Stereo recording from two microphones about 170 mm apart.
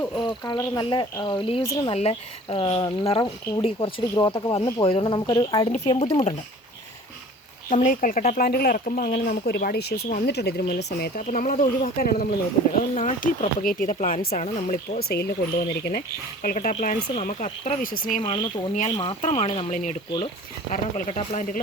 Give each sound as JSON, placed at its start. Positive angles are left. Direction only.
{"t": 0.2, "sound": "speech", "side_deg": 25}
{"t": 1.6, "sound": "speech", "side_deg": 20}
{"t": 1.9, "sound": "speech", "side_deg": 35}
{"t": 5.7, "sound": "speech", "side_deg": 40}
{"t": 7.9, "sound": "speech", "side_deg": 50}
{"t": 11.9, "sound": "speech", "side_deg": 55}
{"t": 12.9, "sound": "speech", "side_deg": 45}
{"t": 14.4, "sound": "speech", "side_deg": 40}
{"t": 14.9, "sound": "speech", "side_deg": 65}
{"t": 18.2, "sound": "speech", "side_deg": 30}
{"t": 18.7, "sound": "speech", "side_deg": 45}
{"t": 19.2, "sound": "speech", "side_deg": 35}
{"t": 19.7, "sound": "speech", "side_deg": 45}
{"t": 20.1, "sound": "speech", "side_deg": 30}